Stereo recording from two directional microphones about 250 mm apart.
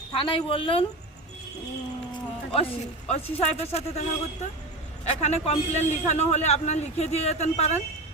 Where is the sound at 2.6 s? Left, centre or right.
Left.